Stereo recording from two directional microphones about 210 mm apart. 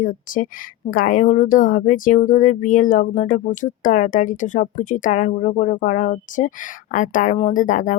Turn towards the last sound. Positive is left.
turn(degrees=35)  # may be behind; listen again after turning